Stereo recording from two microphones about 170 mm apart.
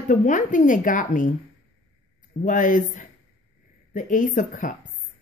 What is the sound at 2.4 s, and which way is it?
Speech, 50° left (ahead or behind).